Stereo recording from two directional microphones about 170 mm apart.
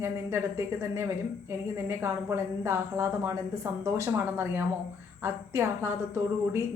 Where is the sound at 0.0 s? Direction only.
15° right (ahead or behind).